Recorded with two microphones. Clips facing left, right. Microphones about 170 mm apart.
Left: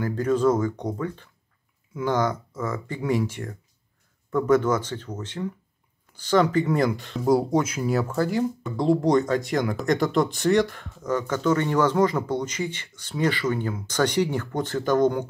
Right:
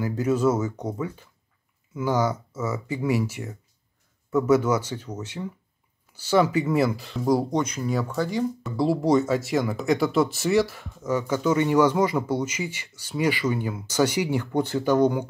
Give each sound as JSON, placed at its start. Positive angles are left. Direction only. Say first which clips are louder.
{"t": 0.0, "sound": "speech", "louder": "left 1 dB", "side_deg": -10}